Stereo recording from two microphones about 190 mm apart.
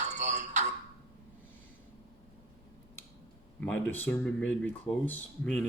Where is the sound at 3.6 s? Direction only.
10° left (ahead or behind).